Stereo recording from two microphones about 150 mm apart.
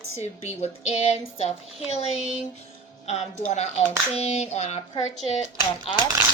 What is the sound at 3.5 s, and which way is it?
Speech, 50° left (ahead or behind).